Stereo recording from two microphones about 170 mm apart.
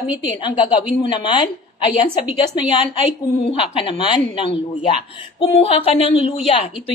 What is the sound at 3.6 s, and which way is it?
A woman's voice, 30° left (ahead or behind).